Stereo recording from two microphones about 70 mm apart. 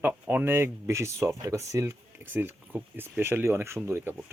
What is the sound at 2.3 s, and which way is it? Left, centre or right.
Speech, right.